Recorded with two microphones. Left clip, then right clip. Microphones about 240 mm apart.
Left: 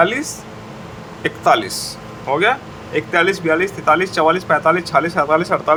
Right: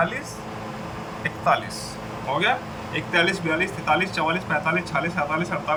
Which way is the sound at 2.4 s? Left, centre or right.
Centre.